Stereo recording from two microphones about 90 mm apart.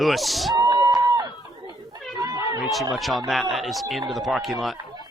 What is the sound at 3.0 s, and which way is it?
Speech, centre (ahead or behind).